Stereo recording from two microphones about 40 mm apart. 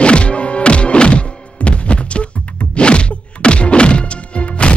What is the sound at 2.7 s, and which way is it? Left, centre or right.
Music, left.